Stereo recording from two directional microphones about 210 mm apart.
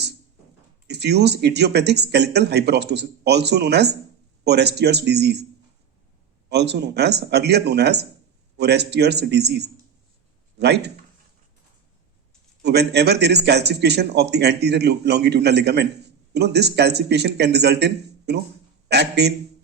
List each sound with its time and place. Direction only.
0.9 s a man's voice: 50° right (ahead or behind)
6.5 s a man's voice: 50° right (ahead or behind)
12.6 s a man's voice: 50° right (ahead or behind)